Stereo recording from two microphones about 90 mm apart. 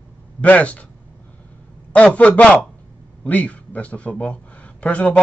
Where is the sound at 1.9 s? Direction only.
15° left (ahead or behind).